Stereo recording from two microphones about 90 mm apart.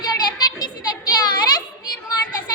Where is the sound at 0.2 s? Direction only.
50° left (ahead or behind).